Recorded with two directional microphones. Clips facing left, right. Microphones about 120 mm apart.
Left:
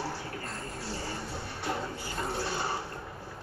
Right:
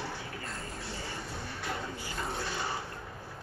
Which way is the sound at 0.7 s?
35° left (ahead or behind).